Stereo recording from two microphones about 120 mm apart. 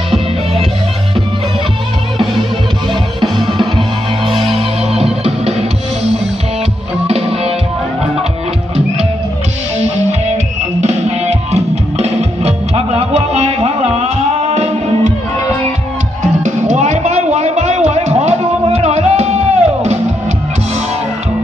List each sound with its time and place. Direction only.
2.9 s music: 40° right (ahead or behind)
5.2 s music: 60° right (ahead or behind)
7.1 s music: 55° right (ahead or behind)
10.3 s music: 70° right (ahead or behind)
16.2 s music: 85° right; by 20.0 s 65° right (ahead or behind)